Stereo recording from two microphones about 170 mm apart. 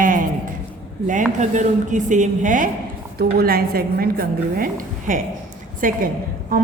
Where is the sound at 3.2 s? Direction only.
65° right (ahead or behind).